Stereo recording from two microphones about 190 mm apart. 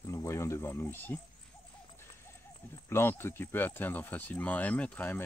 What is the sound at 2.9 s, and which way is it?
Speech, 10° left (ahead or behind).